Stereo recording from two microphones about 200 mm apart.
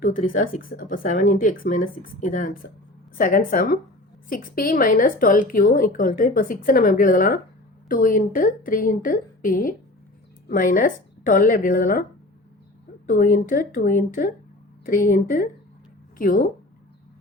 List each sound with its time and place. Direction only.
0.0 s a woman's voice: 45° left (ahead or behind)
13.1 s a woman's voice: 45° left (ahead or behind)